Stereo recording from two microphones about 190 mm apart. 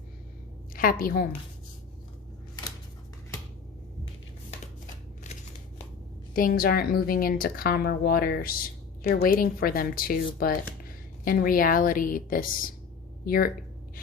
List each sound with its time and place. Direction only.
0.7 s a woman's voice: 50° left (ahead or behind)
6.3 s speech: 50° left (ahead or behind)